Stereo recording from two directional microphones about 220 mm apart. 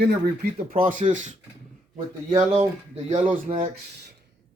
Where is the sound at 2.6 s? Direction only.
30° right (ahead or behind).